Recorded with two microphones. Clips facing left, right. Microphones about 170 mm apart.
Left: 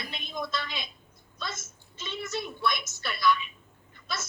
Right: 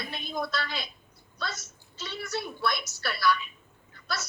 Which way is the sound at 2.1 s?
20° left (ahead or behind).